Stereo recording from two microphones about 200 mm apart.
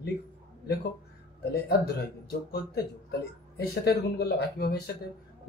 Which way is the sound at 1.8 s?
50° left (ahead or behind).